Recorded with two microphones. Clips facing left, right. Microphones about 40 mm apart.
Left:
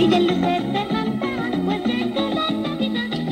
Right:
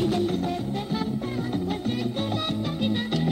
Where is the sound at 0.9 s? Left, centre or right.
Left.